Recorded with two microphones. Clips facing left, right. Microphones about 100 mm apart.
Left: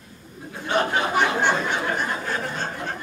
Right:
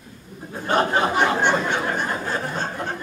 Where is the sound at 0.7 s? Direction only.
45° right (ahead or behind).